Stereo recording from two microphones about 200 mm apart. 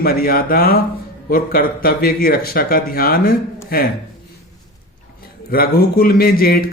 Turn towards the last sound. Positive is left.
turn(degrees=50)  # may be behind; listen again after turning